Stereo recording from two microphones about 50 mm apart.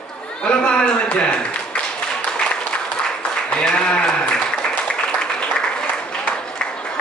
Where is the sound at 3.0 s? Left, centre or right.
Centre.